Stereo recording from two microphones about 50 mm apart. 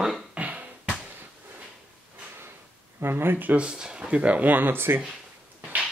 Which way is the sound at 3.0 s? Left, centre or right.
Right.